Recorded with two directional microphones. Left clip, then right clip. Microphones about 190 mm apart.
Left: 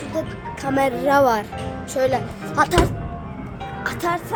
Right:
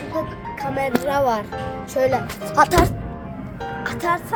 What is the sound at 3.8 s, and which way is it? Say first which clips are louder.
Music: right 1 dB; centre (ahead or behind).